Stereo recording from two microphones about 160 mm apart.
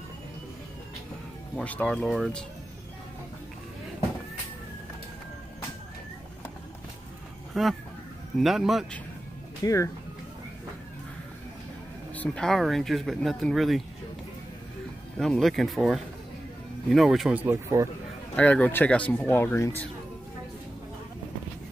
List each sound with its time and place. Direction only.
1.6 s speech: 10° left (ahead or behind)
7.5 s speech: centre (ahead or behind)
9.6 s speech: 20° left (ahead or behind)
12.2 s speech: 5° left (ahead or behind)
15.1 s speech: centre (ahead or behind); by 17.8 s 15° right (ahead or behind)
18.3 s speech: 10° left (ahead or behind)